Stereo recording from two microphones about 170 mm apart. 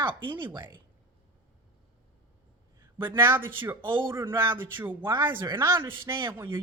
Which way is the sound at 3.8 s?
30° right (ahead or behind).